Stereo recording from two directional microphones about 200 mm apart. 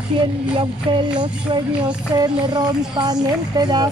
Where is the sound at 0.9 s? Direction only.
25° right (ahead or behind).